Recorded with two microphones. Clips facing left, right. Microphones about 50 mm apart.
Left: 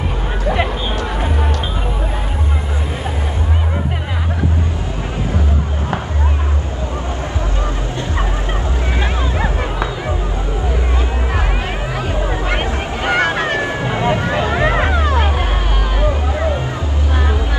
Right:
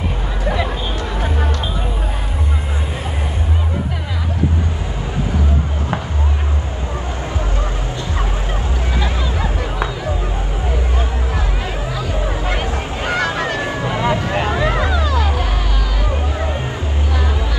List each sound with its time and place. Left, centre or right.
9.0 s a sound: left
12.4 s vehicle: left
14.5 s music: left